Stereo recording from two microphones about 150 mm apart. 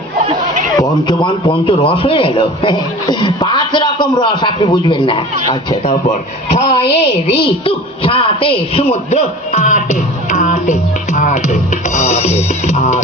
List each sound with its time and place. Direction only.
0.8 s a man's voice: 30° left (ahead or behind)
6.5 s a woman's voice: 40° left (ahead or behind)